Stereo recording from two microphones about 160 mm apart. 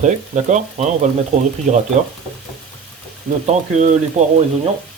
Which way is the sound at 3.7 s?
50° right (ahead or behind).